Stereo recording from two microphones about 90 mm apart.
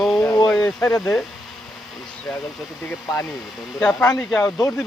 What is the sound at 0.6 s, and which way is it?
Speech, 30° left (ahead or behind).